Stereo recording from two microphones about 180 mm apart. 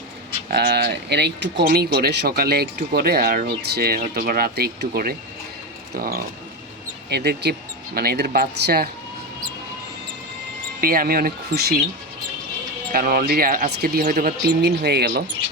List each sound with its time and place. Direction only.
0.5 s speech: 65° right (ahead or behind)
10.8 s speech: 55° right (ahead or behind)
12.9 s speech: 55° right (ahead or behind)